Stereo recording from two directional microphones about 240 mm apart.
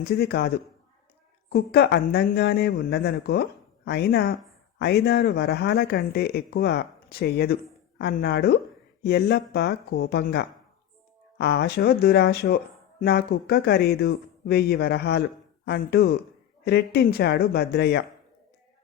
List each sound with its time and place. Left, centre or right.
0.0 s speech: left